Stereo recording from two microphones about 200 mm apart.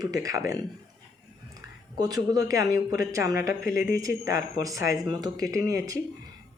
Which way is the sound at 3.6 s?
45° left (ahead or behind).